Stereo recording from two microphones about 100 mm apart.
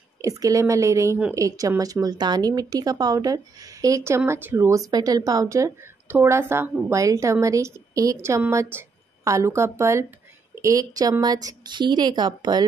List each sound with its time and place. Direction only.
0.2 s a woman's voice: 35° right (ahead or behind)
4.6 s a woman's voice: 35° right (ahead or behind)